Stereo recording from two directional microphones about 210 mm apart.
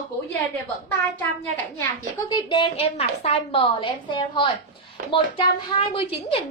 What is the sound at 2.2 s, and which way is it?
A woman's voice, 20° left (ahead or behind).